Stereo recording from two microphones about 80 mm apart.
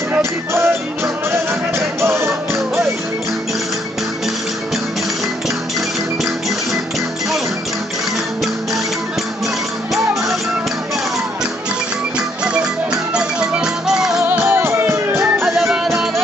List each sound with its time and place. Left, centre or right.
0.2 s music: right
13.1 s music: centre
14.4 s music: right
15.4 s music: centre